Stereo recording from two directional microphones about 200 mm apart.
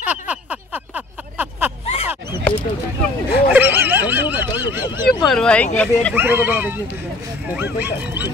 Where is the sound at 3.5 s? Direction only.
10° right (ahead or behind).